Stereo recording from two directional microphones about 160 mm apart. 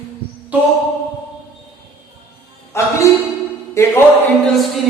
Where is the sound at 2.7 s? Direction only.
15° left (ahead or behind).